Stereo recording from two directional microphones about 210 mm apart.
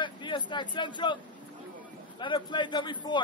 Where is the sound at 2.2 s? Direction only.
20° left (ahead or behind).